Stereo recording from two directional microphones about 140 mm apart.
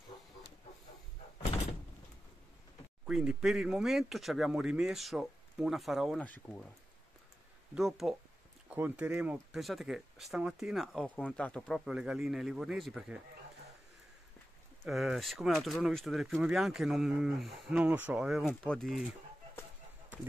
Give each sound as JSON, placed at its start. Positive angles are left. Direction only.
{"t": 3.1, "sound": "speech", "side_deg": -5}
{"t": 6.2, "sound": "speech", "side_deg": 15}
{"t": 7.7, "sound": "speech", "side_deg": -5}
{"t": 11.3, "sound": "speech", "side_deg": 10}
{"t": 14.9, "sound": "speech", "side_deg": 0}
{"t": 18.5, "sound": "speech", "side_deg": 5}